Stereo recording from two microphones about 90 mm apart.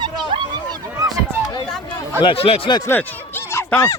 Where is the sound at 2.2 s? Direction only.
85° left.